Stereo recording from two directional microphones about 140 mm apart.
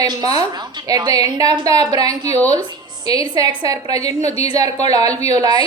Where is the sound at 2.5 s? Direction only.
30° right (ahead or behind).